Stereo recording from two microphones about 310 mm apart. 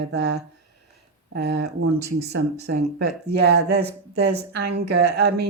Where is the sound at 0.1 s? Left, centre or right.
Right.